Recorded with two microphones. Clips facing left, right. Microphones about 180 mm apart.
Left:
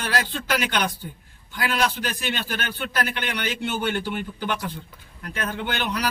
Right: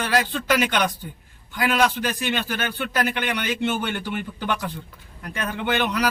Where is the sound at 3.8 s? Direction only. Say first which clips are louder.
Left 2 dB; 45° left (ahead or behind).